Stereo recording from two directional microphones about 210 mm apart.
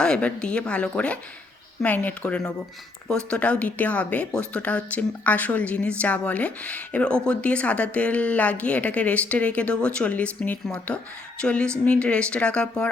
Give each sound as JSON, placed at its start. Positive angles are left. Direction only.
{"t": 0.0, "sound": "speech", "side_deg": 5}